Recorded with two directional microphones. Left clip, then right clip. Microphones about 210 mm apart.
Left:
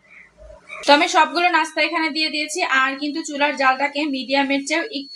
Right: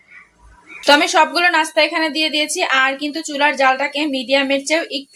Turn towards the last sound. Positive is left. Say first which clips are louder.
# right 4 dB
turn(degrees=-30)  # may be behind; listen again after turning